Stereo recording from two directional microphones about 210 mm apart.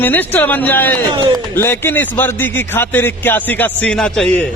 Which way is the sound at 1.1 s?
20° right (ahead or behind).